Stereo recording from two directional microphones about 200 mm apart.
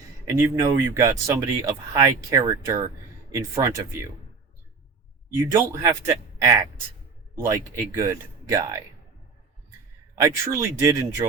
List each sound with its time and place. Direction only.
0.3 s speech: 15° right (ahead or behind)
5.5 s speech: 15° right (ahead or behind)
10.2 s speech: 15° right (ahead or behind)